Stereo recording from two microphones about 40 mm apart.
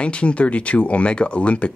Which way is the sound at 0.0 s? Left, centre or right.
Left.